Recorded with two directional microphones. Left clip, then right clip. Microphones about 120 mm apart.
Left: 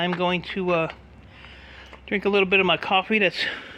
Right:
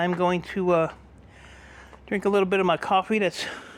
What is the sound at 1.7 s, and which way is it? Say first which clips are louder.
Speech: left 2 dB; 25° right (ahead or behind).